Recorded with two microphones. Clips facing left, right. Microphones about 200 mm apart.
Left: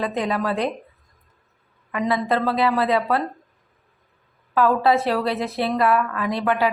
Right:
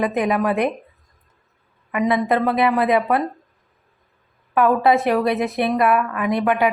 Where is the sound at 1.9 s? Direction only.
15° right (ahead or behind).